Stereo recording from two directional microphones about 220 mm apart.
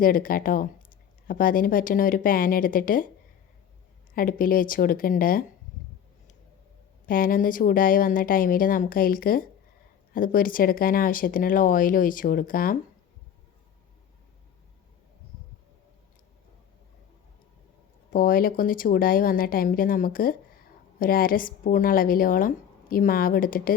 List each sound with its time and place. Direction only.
0.0 s a woman's voice: 40° left (ahead or behind)
4.1 s a woman's voice: 40° left (ahead or behind)
7.1 s a woman's voice: 40° left (ahead or behind)
18.1 s a woman's voice: 40° left (ahead or behind)